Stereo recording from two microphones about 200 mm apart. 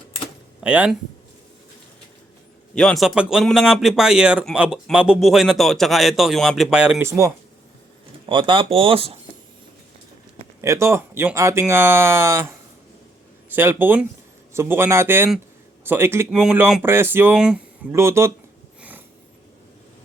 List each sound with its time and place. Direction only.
0.6 s speech: 5° right (ahead or behind)
2.7 s a man's voice: centre (ahead or behind)
8.3 s speech: 25° right (ahead or behind)
10.6 s speech: 15° right (ahead or behind)
18.8 s a sound: 10° right (ahead or behind)